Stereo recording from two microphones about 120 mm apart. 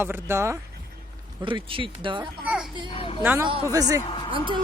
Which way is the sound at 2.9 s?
50° left (ahead or behind).